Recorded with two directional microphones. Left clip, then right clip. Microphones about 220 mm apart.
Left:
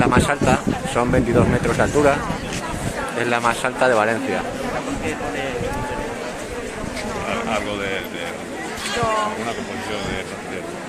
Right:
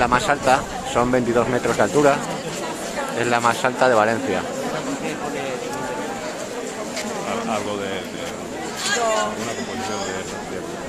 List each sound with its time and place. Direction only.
0.0 s speech: centre (ahead or behind)
3.2 s speech: centre (ahead or behind)